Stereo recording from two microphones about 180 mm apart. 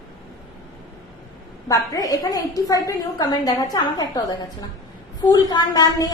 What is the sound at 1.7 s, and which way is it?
A woman's voice, 20° left (ahead or behind).